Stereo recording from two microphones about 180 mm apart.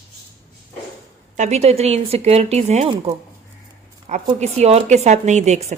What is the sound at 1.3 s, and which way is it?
Speech, 40° right (ahead or behind).